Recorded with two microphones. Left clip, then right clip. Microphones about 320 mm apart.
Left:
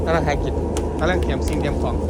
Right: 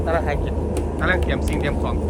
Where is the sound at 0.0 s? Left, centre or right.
Left.